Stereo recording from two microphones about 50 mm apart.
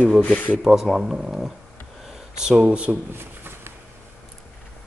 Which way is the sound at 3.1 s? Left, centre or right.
Right.